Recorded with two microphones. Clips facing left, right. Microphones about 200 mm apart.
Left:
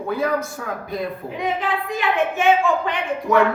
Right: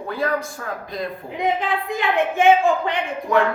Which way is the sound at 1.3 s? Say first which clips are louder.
Right 2 dB; 20° right (ahead or behind).